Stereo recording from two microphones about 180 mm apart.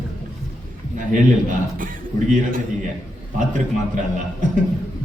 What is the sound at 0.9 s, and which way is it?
A woman's voice, 50° right (ahead or behind).